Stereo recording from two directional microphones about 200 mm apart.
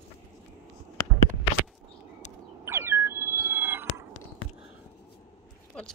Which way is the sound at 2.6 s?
10° right (ahead or behind).